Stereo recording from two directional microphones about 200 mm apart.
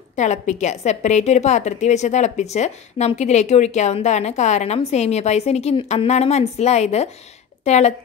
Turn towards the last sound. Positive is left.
turn(degrees=35)  # may be behind; listen again after turning